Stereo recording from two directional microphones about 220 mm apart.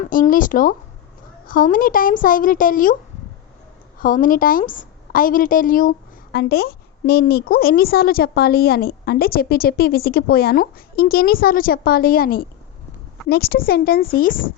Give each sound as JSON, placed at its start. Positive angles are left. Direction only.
{"t": 0.0, "sound": "a woman's voice", "side_deg": 40}
{"t": 4.0, "sound": "a woman's voice", "side_deg": 40}